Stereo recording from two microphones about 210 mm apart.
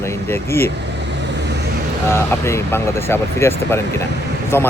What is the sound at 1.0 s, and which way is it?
Vehicle, 55° right (ahead or behind).